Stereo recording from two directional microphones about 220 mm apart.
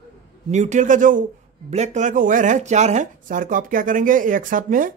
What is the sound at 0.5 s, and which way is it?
Speech, 30° right (ahead or behind).